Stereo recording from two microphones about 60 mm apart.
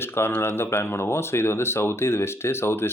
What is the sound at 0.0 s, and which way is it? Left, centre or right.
Speech, left.